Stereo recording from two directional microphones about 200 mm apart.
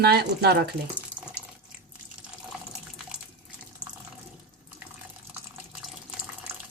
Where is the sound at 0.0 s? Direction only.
55° right (ahead or behind).